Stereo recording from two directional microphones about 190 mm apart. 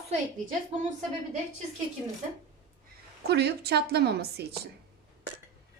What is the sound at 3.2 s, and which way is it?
A woman's voice, 60° right (ahead or behind).